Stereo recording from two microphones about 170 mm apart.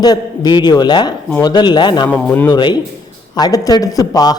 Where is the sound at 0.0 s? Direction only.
25° left (ahead or behind).